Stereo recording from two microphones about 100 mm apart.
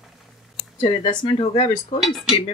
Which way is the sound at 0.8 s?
55° left (ahead or behind).